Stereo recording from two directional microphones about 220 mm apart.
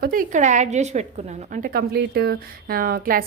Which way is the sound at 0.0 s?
40° right (ahead or behind).